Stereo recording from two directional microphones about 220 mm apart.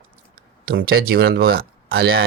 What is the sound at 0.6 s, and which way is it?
Speech, 45° right (ahead or behind).